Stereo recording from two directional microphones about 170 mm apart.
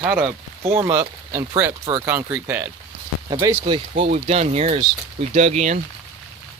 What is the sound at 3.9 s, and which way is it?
Speech, 35° right (ahead or behind).